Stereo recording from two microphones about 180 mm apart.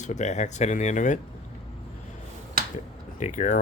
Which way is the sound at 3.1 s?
45° left (ahead or behind).